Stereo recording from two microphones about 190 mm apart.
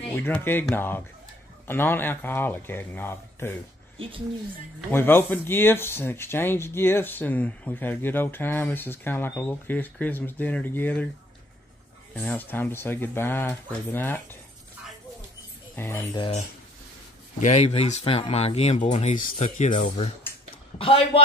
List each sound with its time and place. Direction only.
0.1 s speech: 10° left (ahead or behind)
4.9 s speech: 10° left (ahead or behind)
12.2 s speech: 10° left (ahead or behind)
15.7 s speech: 15° left (ahead or behind)
17.4 s speech: 35° left (ahead or behind)
20.7 s speech: 30° left (ahead or behind)